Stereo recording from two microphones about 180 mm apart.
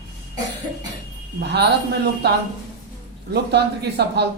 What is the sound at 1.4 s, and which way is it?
Speech, 65° right (ahead or behind).